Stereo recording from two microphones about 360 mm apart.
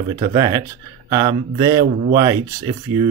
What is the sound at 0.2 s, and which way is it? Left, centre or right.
Speech, centre.